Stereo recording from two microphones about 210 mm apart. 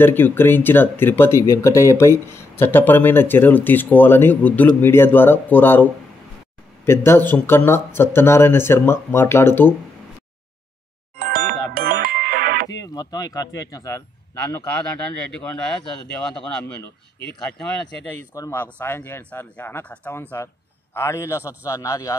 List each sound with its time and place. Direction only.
0.0 s speech: 10° left (ahead or behind)
6.9 s speech: 10° left (ahead or behind)
11.1 s music: 45° right (ahead or behind)
12.9 s speech: 15° left (ahead or behind)
15.3 s speech: 5° left (ahead or behind)
18.3 s speech: 10° left (ahead or behind)